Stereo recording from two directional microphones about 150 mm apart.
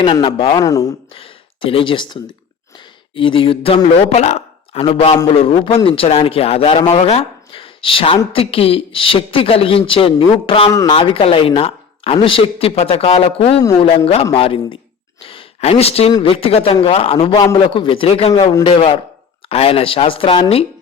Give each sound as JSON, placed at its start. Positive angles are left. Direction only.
{"t": 0.0, "sound": "speech", "side_deg": 30}
{"t": 0.6, "sound": "speech", "side_deg": 20}
{"t": 1.1, "sound": "speech", "side_deg": 40}
{"t": 17.3, "sound": "speech", "side_deg": 30}
{"t": 18.3, "sound": "speech", "side_deg": 30}